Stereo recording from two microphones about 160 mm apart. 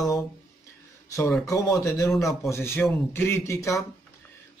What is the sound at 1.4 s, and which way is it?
Speech, 20° left (ahead or behind).